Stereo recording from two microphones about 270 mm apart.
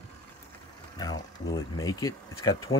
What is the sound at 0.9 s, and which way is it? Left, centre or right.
Speech, centre.